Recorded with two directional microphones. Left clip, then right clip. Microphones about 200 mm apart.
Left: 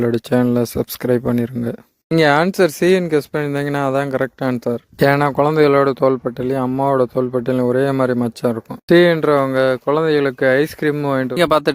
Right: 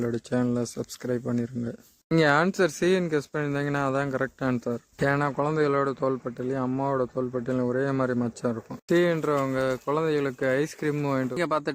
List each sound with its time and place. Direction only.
0.0 s speech: 40° left (ahead or behind)
11.3 s speech: 40° left (ahead or behind)